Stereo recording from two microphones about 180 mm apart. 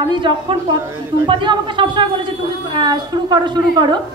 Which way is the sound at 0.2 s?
25° right (ahead or behind).